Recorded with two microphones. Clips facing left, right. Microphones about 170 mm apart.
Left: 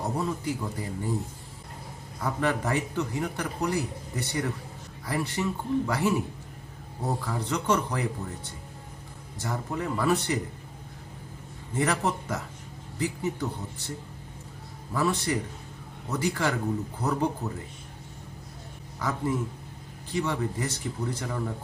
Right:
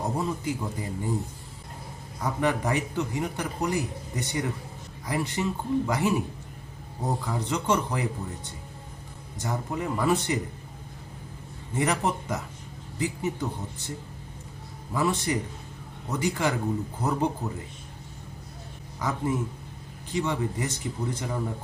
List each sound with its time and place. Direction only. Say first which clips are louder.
0.2 s speech: right 1 dB; 20° right (ahead or behind)
2.2 s a man's voice: right 1 dB; 15° right (ahead or behind)
7.3 s speech: even; 20° right (ahead or behind)
9.4 s a man's voice: right 1 dB; 15° right (ahead or behind)
11.8 s a man's voice: right 1 dB; 20° right (ahead or behind)
14.9 s a man's voice: right 1 dB; 20° right (ahead or behind)
18.9 s speech: right 1 dB; 20° right (ahead or behind)